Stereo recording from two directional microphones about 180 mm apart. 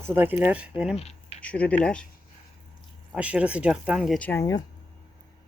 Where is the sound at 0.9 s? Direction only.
35° left (ahead or behind).